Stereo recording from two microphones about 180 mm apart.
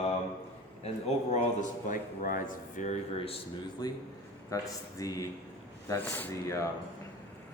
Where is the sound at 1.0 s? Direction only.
35° left (ahead or behind).